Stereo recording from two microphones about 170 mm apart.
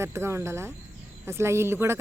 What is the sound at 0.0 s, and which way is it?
Speech, 15° right (ahead or behind).